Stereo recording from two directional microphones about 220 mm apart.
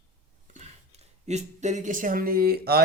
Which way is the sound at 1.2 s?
30° right (ahead or behind).